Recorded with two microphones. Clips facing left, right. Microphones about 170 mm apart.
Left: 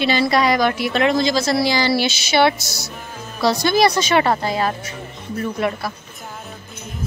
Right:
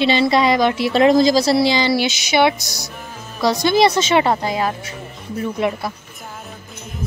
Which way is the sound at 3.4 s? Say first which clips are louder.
Right 1 dB; 20° right (ahead or behind).